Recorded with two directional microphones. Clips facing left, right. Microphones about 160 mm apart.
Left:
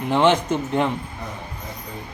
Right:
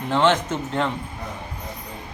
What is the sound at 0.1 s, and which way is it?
Speech, 15° left (ahead or behind).